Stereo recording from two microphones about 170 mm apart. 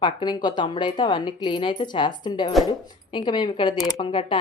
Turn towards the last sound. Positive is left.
turn(degrees=30)  # may be behind; listen again after turning